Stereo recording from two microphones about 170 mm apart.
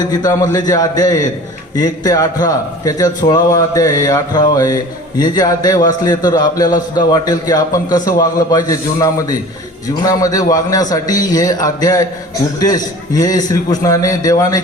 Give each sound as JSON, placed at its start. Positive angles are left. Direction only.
{"t": 0.1, "sound": "a man's voice", "side_deg": 20}